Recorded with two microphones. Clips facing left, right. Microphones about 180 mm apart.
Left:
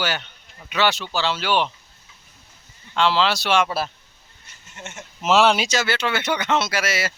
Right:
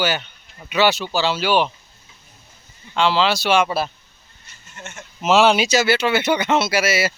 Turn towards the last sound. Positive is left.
turn(degrees=-5)  # may be behind; listen again after turning